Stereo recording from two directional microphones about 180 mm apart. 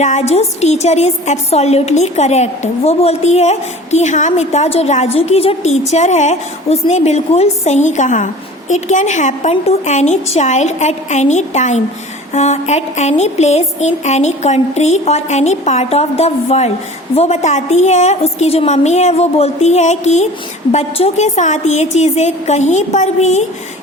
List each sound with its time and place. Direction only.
0.0 s a woman's voice: 40° left (ahead or behind)